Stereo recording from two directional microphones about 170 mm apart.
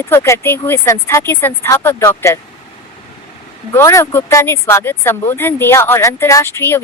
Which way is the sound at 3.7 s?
15° left (ahead or behind).